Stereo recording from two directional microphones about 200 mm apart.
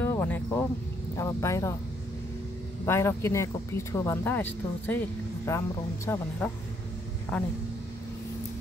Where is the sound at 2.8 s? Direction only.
15° left (ahead or behind).